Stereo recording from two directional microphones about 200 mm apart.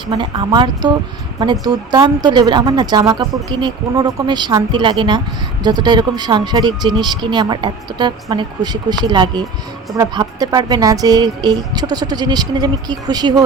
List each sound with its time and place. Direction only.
0.1 s speech: 25° right (ahead or behind)